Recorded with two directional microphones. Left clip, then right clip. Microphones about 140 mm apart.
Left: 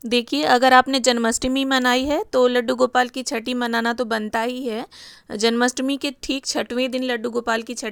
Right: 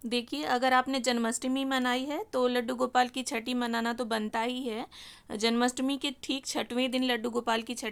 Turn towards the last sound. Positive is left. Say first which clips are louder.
# left 7 dB
turn(degrees=30)  # may be behind; listen again after turning